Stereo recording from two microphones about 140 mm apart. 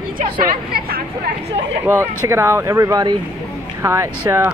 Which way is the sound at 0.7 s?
90° right.